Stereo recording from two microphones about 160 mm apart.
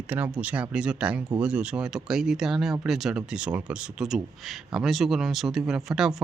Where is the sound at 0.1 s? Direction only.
10° right (ahead or behind).